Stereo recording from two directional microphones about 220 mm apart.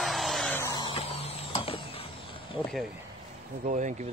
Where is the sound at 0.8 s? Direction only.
25° left (ahead or behind).